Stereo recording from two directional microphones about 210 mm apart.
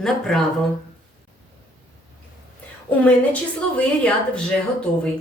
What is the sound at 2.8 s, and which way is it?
Speech, 5° left (ahead or behind).